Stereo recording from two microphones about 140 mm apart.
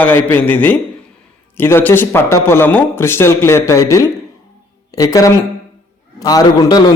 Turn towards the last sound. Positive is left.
turn(degrees=30)  # may be behind; listen again after turning